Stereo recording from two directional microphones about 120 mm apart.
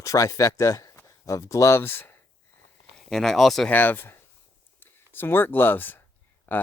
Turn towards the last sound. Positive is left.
turn(degrees=15)  # may be behind; listen again after turning